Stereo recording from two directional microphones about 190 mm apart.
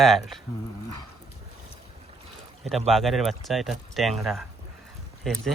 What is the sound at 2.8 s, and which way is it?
Speech, centre (ahead or behind).